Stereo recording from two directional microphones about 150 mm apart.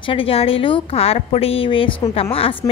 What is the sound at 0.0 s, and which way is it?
A woman's voice, 35° left (ahead or behind).